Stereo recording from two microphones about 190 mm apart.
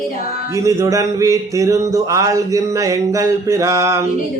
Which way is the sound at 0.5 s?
15° right (ahead or behind).